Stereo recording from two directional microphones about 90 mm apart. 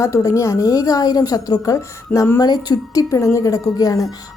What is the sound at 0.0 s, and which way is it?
A woman's voice, 35° left (ahead or behind).